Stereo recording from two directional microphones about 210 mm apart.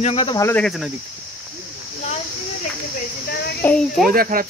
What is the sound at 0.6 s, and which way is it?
Speech, centre (ahead or behind).